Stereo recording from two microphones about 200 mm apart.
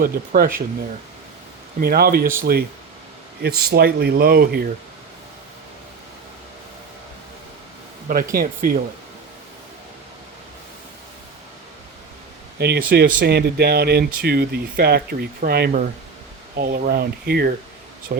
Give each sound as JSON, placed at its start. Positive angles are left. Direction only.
{"t": 0.0, "sound": "speech", "side_deg": -45}
{"t": 1.8, "sound": "speech", "side_deg": -50}
{"t": 8.0, "sound": "speech", "side_deg": -45}
{"t": 12.5, "sound": "speech", "side_deg": -55}